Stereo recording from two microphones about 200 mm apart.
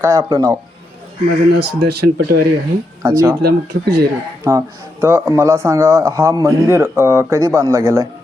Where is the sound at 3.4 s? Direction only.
50° right (ahead or behind).